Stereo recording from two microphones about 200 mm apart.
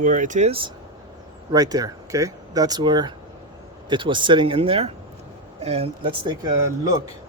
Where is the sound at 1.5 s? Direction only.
20° right (ahead or behind).